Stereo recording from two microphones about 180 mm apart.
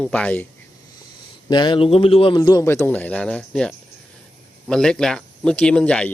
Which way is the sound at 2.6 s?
10° left (ahead or behind).